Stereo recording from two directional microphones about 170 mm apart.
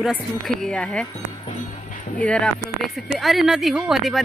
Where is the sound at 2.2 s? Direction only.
5° left (ahead or behind).